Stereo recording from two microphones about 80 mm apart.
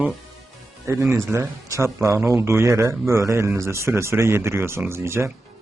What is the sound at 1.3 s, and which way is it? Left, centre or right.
Speech, right.